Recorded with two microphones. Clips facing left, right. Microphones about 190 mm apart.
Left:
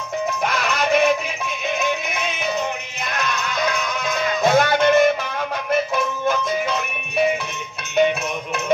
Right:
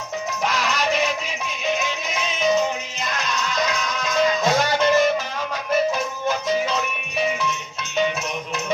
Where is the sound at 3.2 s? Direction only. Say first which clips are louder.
Left 1 dB; 60° left (ahead or behind).